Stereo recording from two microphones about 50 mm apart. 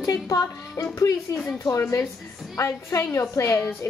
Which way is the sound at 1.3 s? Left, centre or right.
Left.